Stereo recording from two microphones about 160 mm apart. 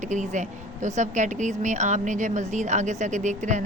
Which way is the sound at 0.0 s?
50° right (ahead or behind).